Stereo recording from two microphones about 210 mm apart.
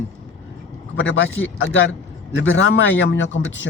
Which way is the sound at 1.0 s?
65° left (ahead or behind).